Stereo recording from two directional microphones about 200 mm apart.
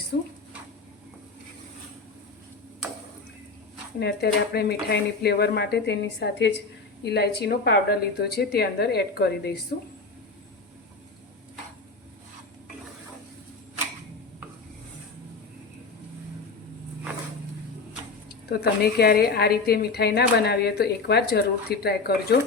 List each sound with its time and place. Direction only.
4.0 s a woman's voice: 55° left (ahead or behind)
18.3 s a woman's voice: 50° left (ahead or behind)